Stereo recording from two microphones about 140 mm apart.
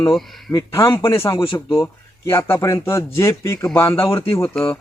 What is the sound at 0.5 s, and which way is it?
Speech, 20° left (ahead or behind).